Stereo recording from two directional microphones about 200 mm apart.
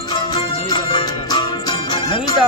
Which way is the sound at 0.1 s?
20° left (ahead or behind).